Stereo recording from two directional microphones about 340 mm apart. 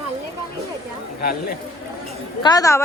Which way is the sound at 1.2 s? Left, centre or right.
Left.